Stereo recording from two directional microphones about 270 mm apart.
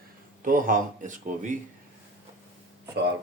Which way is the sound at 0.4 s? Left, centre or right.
Right.